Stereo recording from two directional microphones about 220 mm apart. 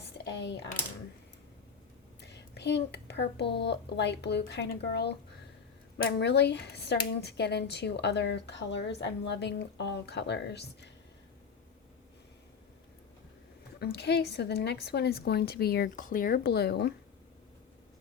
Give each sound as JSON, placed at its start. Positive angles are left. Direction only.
{"t": 0.3, "sound": "a sound", "side_deg": 55}
{"t": 2.2, "sound": "a child's voice", "side_deg": 50}
{"t": 13.7, "sound": "speech", "side_deg": 50}